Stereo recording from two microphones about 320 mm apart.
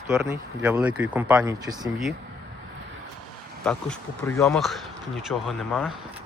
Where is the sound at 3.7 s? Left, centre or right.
Centre.